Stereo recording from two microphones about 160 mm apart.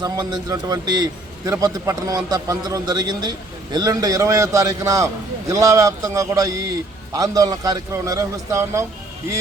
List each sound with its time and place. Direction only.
0.0 s a man's voice: 25° right (ahead or behind)